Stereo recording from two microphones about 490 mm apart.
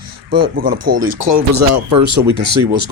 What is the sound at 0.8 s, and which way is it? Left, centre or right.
Speech, right.